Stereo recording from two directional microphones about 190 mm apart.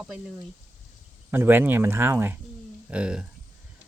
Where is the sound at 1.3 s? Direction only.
10° right (ahead or behind).